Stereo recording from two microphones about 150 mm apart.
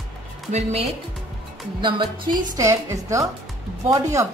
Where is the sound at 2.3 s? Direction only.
25° right (ahead or behind).